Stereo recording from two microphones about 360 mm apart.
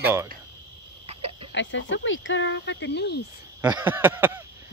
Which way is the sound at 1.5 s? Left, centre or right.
Left.